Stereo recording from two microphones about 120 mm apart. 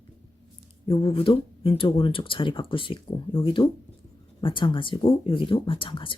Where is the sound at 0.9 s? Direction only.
50° left (ahead or behind).